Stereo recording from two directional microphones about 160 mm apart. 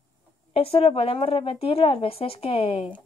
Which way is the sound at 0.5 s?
40° left (ahead or behind).